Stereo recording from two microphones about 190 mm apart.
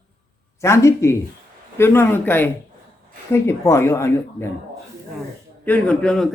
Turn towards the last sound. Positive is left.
turn(degrees=5)  # may be behind; listen again after turning